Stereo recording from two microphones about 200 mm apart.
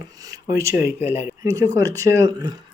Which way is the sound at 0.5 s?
15° right (ahead or behind).